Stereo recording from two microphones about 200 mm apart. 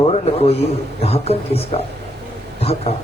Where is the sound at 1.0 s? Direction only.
30° left (ahead or behind).